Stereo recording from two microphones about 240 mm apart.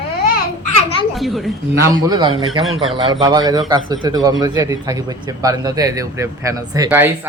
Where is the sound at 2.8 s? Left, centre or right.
Centre.